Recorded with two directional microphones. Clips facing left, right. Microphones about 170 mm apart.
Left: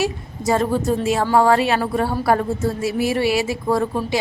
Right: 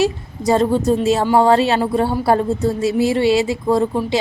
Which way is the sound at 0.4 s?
25° right (ahead or behind).